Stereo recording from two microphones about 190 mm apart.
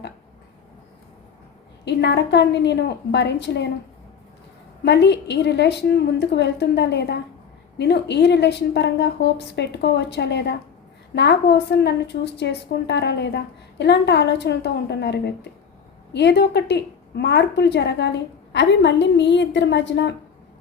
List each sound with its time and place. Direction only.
1.8 s a woman's voice: 65° left (ahead or behind)
4.9 s a woman's voice: 65° left (ahead or behind)